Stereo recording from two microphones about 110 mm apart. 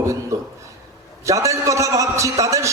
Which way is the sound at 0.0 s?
30° right (ahead or behind).